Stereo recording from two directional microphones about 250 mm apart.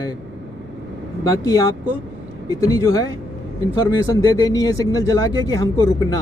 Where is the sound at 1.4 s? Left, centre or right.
Centre.